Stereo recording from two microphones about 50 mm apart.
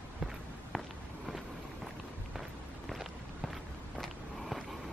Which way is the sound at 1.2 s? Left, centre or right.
Centre.